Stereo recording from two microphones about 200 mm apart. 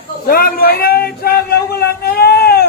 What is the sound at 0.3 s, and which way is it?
A man's voice, 50° left (ahead or behind).